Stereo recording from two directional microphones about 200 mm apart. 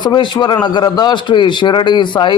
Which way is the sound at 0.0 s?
20° left (ahead or behind).